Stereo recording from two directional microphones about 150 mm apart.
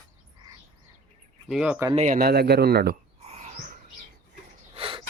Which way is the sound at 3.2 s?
50° right (ahead or behind).